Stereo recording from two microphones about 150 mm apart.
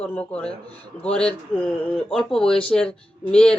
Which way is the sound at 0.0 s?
10° left (ahead or behind).